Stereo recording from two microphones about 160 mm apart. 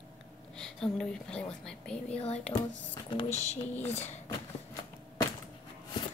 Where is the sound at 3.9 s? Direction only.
45° left (ahead or behind).